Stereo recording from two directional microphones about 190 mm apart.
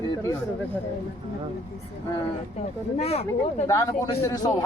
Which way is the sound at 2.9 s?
35° left (ahead or behind).